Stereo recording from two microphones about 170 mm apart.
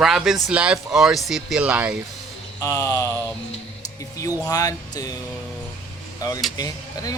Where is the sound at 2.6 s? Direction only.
20° left (ahead or behind).